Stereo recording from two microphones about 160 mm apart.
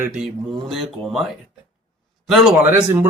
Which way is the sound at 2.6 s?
15° right (ahead or behind).